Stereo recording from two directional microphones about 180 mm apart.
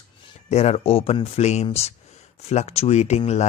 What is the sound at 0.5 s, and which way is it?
Speech, 35° left (ahead or behind).